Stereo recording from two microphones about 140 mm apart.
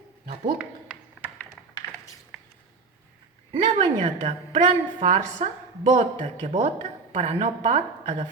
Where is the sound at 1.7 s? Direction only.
25° left (ahead or behind).